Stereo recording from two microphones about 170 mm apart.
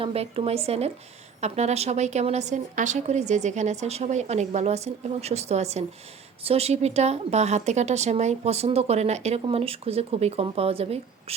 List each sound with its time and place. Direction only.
0.0 s speech: 35° right (ahead or behind)